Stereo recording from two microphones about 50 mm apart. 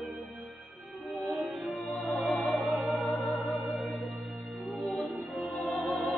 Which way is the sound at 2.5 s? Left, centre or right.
Left.